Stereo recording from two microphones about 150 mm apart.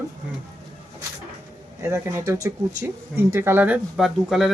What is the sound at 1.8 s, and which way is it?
A man's voice, 20° right (ahead or behind).